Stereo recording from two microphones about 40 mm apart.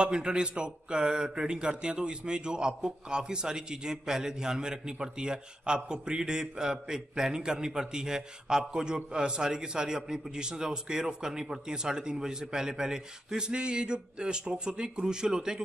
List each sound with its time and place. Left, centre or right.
0.0 s a man's voice: centre